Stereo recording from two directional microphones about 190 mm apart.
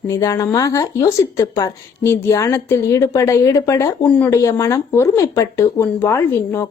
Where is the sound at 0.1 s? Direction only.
20° left (ahead or behind).